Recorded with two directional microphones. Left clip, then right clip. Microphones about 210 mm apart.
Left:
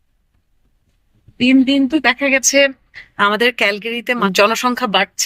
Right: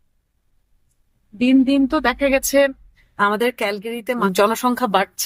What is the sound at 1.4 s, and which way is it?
Speech, 15° right (ahead or behind).